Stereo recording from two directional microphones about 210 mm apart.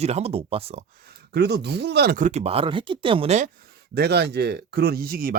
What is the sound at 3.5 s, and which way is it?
Speech, 45° right (ahead or behind).